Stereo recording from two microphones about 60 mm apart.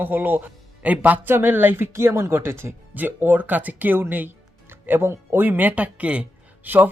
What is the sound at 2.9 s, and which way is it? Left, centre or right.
A woman's voice, right.